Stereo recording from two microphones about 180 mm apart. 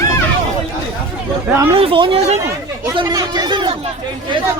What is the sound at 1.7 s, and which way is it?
Speech, 30° right (ahead or behind).